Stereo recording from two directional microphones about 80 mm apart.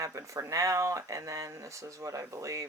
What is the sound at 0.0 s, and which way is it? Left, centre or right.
Speech, right.